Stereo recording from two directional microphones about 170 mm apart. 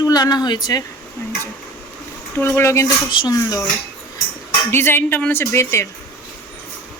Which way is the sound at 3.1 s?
25° left (ahead or behind).